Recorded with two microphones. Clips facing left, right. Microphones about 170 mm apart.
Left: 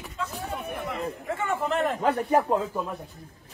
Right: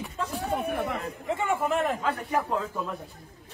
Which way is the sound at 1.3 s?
15° right (ahead or behind).